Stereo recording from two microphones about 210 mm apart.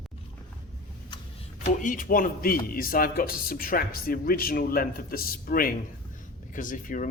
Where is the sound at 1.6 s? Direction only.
40° left (ahead or behind).